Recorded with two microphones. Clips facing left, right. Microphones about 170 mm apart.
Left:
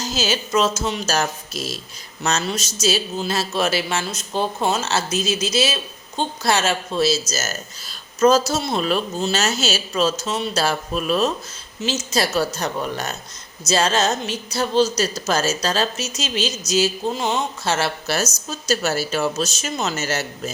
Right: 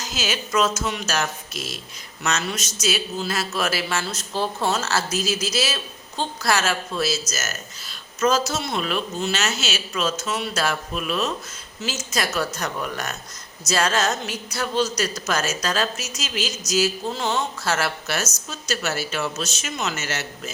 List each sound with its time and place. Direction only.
0.0 s a woman's voice: 30° left (ahead or behind)
11.8 s a woman's voice: 25° left (ahead or behind)